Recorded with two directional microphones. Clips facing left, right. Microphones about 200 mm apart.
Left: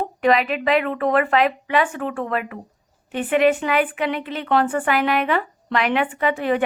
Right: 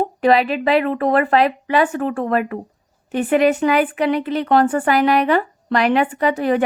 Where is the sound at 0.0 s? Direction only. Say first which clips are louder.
Right 3 dB; 35° right (ahead or behind).